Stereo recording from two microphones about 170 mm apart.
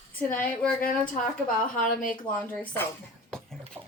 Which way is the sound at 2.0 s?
5° left (ahead or behind).